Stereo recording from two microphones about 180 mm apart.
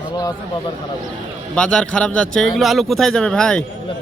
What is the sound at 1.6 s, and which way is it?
Speech, 5° left (ahead or behind).